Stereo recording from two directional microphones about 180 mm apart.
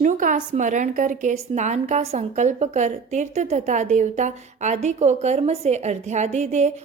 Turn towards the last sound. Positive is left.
turn(degrees=-40)  # may be behind; listen again after turning